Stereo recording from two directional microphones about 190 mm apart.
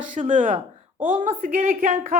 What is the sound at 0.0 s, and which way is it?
Speech, 40° right (ahead or behind).